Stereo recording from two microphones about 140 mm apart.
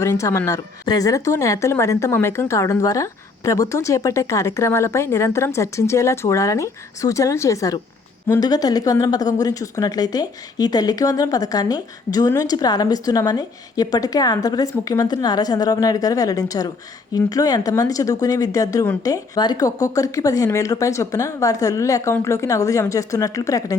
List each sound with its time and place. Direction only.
0.0 s a woman's voice: 20° left (ahead or behind)